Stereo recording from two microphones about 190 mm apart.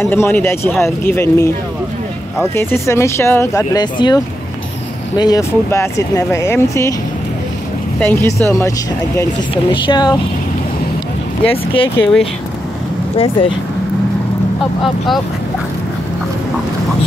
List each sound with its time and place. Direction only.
0.0 s speech: 10° left (ahead or behind)
2.5 s speech: 15° left (ahead or behind)
8.0 s speech: 10° left (ahead or behind)
11.4 s speech: 30° left (ahead or behind)
12.0 s speech: 5° left (ahead or behind)